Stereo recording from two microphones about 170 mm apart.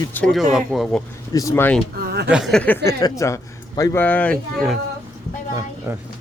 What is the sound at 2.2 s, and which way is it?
Speech, 5° right (ahead or behind).